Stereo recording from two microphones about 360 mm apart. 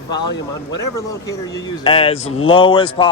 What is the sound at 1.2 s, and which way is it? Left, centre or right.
Speech, centre.